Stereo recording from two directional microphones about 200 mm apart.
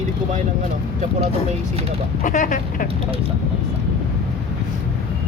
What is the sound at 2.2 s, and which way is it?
Speech, 40° left (ahead or behind).